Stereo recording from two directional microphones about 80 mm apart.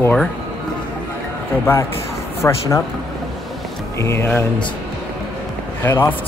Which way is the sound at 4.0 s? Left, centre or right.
Left.